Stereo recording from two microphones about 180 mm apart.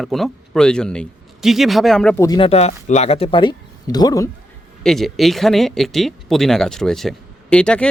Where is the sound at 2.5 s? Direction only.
35° left (ahead or behind); by 4.2 s 20° left (ahead or behind).